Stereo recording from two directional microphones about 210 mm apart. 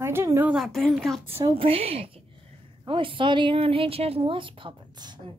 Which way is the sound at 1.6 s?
25° right (ahead or behind).